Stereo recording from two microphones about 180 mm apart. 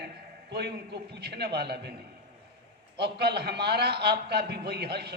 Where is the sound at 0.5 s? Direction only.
65° right (ahead or behind).